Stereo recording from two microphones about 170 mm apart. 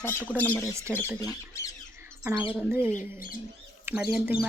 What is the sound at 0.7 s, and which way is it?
Speech, 15° right (ahead or behind).